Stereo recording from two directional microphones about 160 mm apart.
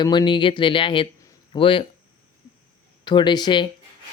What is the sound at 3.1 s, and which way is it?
Speech, 30° left (ahead or behind).